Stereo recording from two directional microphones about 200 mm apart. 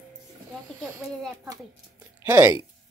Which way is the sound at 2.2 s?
10° right (ahead or behind).